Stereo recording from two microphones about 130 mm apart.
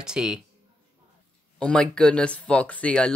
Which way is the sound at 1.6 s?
5° left (ahead or behind).